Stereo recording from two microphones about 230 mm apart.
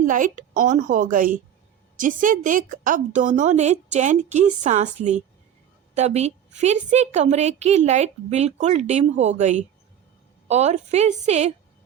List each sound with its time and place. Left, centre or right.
0.0 s a woman's voice: right